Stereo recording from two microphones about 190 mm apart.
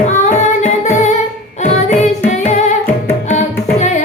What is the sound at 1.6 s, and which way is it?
Music, 40° left (ahead or behind).